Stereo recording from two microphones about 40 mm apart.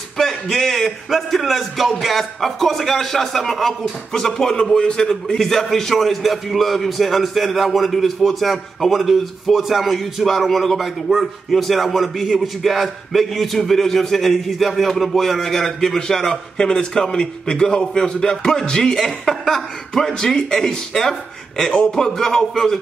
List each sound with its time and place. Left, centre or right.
0.2 s a man's voice: centre; by 5.4 s left
5.4 s a man's voice: centre